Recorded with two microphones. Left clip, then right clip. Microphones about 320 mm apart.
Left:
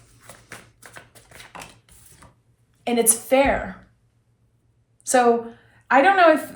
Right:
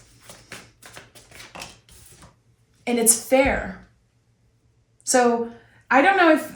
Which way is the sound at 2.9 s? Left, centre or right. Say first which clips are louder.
Even; centre.